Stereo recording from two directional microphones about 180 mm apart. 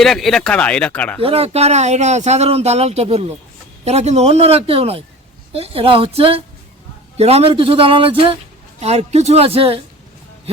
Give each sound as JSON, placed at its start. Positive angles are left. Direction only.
{"t": 0.0, "sound": "speech", "side_deg": 0}
{"t": 1.2, "sound": "a man's voice", "side_deg": -35}